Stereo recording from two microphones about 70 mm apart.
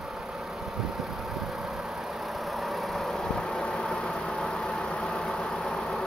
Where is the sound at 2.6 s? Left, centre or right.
Centre.